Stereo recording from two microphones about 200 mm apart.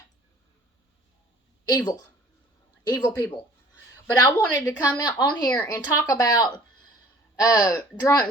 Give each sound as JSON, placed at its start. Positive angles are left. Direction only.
{"t": 1.6, "sound": "speech", "side_deg": 20}